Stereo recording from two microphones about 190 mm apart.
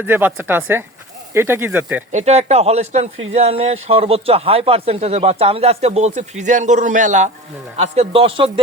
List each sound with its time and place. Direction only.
0.0 s speech: 10° right (ahead or behind)
2.1 s a man's voice: 35° right (ahead or behind)